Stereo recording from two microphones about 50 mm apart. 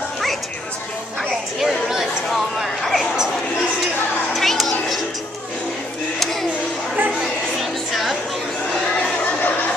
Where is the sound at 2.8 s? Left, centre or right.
Centre.